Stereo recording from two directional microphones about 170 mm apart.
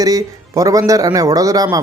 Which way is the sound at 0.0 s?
20° right (ahead or behind).